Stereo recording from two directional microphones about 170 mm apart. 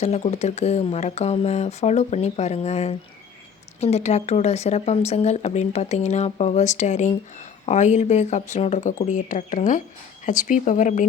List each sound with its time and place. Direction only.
0.0 s speech: 40° left (ahead or behind)